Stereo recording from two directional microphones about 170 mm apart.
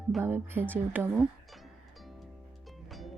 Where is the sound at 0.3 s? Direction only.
10° right (ahead or behind).